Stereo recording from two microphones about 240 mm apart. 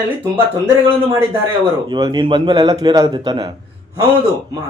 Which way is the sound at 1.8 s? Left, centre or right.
Centre.